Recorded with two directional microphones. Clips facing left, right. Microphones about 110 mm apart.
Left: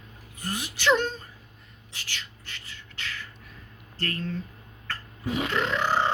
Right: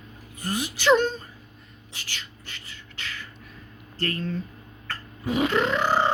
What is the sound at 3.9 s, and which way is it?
Speech, 15° right (ahead or behind).